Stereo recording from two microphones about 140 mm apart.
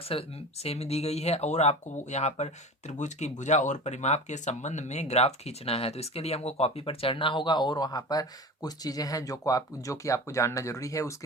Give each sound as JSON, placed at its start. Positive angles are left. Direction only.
{"t": 0.1, "sound": "speech", "side_deg": 45}